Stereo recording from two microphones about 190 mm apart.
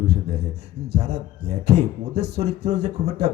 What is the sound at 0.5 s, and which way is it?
Speech, 60° right (ahead or behind).